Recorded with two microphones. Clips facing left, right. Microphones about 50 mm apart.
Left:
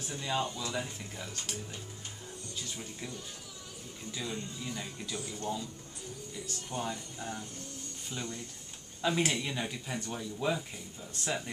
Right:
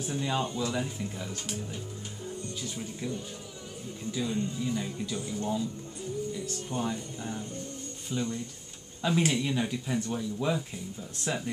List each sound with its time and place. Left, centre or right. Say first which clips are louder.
0.0 s speech: right 3 dB; centre
2.7 s speech: right 5 dB; centre
4.1 s speech: right 8 dB; centre
5.1 s speech: right 3 dB; centre
6.7 s speech: right 4 dB; right
8.1 s speech: right 8 dB; centre